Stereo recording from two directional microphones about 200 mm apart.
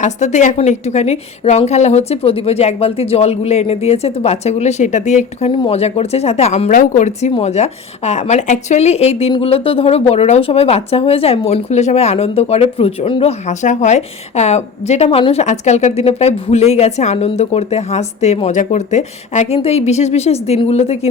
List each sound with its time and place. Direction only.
0.0 s speech: 35° left (ahead or behind)